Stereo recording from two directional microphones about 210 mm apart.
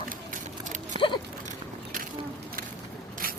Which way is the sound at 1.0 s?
25° right (ahead or behind).